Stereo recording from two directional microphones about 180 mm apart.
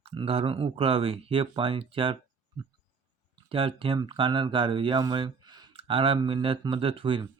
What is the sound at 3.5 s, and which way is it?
Speech, 30° right (ahead or behind).